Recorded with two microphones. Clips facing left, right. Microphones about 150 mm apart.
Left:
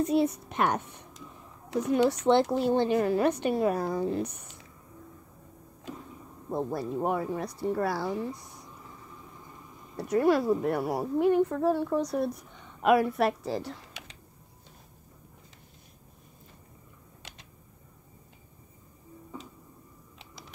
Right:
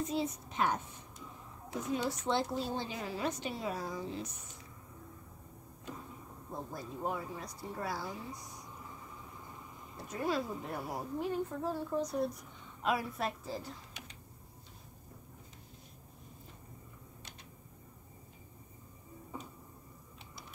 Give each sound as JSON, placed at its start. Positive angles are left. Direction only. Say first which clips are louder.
{"t": 0.0, "sound": "speech", "louder": "left 10 dB", "side_deg": 65}
{"t": 6.5, "sound": "a woman's voice", "louder": "left 12 dB", "side_deg": 70}
{"t": 9.9, "sound": "a woman's voice", "louder": "left 11 dB", "side_deg": 70}
{"t": 17.2, "sound": "a sound", "louder": "left 7 dB", "side_deg": 90}